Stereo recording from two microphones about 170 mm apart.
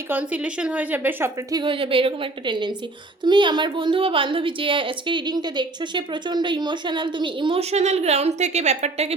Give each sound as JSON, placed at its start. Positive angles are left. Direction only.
{"t": 0.1, "sound": "a woman's voice", "side_deg": -10}